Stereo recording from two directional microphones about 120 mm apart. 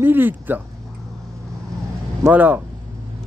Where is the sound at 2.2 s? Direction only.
15° right (ahead or behind).